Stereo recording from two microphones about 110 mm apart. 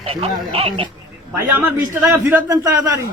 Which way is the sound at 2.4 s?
30° right (ahead or behind).